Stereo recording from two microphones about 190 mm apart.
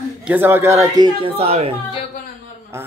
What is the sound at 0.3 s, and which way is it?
Speech, 10° right (ahead or behind).